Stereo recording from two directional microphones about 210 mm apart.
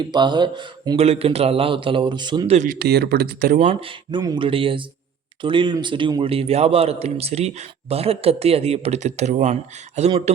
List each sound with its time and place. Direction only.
0.0 s speech: 20° right (ahead or behind)
2.6 s speech: 45° right (ahead or behind); by 10.3 s 30° right (ahead or behind)